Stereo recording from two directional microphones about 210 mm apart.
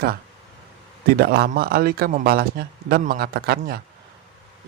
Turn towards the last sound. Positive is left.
turn(degrees=-45)  # may be behind; listen again after turning